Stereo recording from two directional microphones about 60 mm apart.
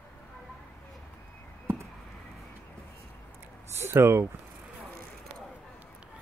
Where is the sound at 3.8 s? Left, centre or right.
Right.